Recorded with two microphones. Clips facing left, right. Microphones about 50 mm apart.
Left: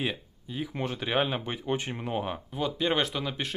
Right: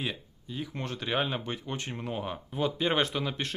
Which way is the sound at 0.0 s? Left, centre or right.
Centre.